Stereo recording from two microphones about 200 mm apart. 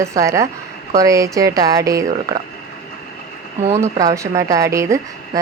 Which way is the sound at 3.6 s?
15° right (ahead or behind).